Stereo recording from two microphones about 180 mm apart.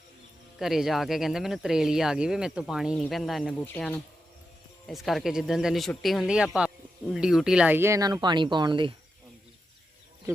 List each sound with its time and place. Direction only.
0.6 s speech: centre (ahead or behind); by 9.0 s 25° right (ahead or behind)